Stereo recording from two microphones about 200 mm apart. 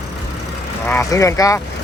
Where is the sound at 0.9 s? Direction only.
15° left (ahead or behind).